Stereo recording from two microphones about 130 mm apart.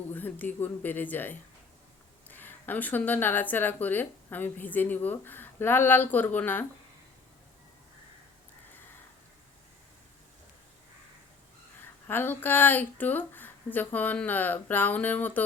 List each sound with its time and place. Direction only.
0.1 s speech: 15° left (ahead or behind)
12.0 s speech: 15° left (ahead or behind)